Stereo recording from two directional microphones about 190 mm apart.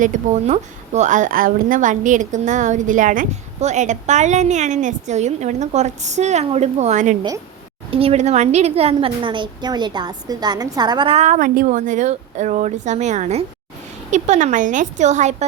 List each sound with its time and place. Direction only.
0.0 s a woman's voice: 40° right (ahead or behind)
7.2 s a woman's voice: 20° right (ahead or behind)
7.9 s a woman's voice: 30° right (ahead or behind)